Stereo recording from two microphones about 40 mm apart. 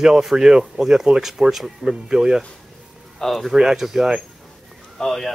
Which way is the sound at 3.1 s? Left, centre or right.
Centre.